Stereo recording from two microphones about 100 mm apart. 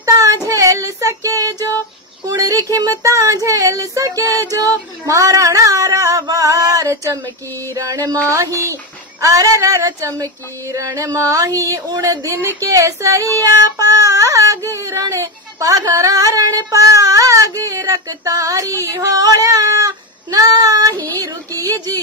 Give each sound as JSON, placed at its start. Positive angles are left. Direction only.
{"t": 0.0, "sound": "child singing", "side_deg": -35}
{"t": 0.5, "sound": "female singing", "side_deg": -30}
{"t": 2.2, "sound": "a sound", "side_deg": -35}
{"t": 13.4, "sound": "child singing", "side_deg": -35}
{"t": 14.7, "sound": "a sound", "side_deg": -30}
{"t": 20.9, "sound": "child singing", "side_deg": 20}